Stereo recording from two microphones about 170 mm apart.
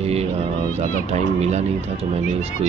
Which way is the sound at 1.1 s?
40° right (ahead or behind).